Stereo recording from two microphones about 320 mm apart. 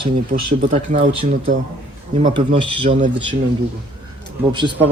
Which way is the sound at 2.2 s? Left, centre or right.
Centre.